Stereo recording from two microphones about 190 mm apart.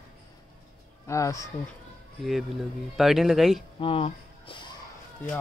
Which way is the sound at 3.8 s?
30° left (ahead or behind).